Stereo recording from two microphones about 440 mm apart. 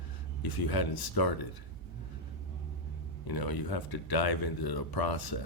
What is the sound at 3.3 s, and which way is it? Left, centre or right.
Speech, left.